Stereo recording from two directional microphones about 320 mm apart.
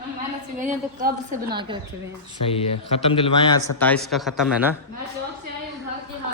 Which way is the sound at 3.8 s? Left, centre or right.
Centre.